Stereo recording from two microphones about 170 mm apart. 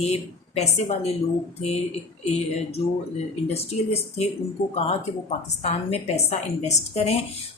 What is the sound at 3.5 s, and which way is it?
Speech, 40° left (ahead or behind).